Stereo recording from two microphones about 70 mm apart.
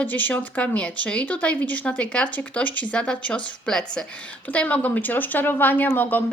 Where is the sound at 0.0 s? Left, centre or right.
Left.